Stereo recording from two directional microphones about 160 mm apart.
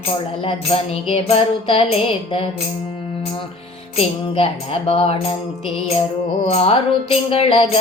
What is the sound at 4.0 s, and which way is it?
Music, 35° left (ahead or behind).